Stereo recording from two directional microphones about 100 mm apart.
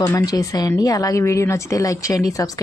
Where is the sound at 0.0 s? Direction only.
35° left (ahead or behind).